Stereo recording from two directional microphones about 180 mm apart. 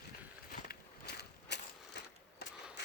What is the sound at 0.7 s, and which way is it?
Crushing, 65° left (ahead or behind).